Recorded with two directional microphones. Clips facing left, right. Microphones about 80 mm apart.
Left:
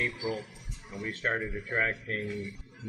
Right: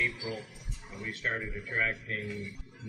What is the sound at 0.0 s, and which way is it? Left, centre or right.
A man's voice, left.